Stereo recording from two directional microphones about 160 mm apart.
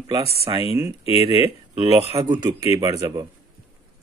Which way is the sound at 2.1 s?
20° right (ahead or behind).